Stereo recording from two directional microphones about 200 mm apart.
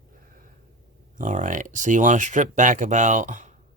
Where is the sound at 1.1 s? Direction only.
40° right (ahead or behind).